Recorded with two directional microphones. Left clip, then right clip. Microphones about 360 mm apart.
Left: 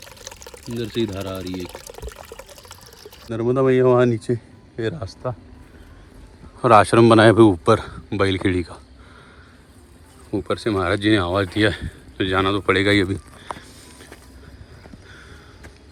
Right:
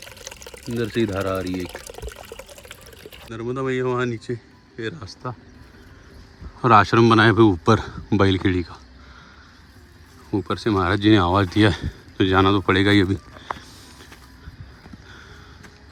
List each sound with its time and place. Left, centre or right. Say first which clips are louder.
0.5 s speech: right 2 dB; centre
1.6 s water: right 1 dB; centre
3.3 s speech: left 8 dB; centre
6.6 s speech: left 2 dB; centre
10.3 s speech: even; centre
13.4 s a sound: right 2 dB; centre